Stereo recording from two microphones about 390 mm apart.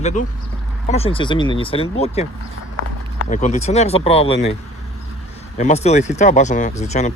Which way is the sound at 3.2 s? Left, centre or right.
Centre.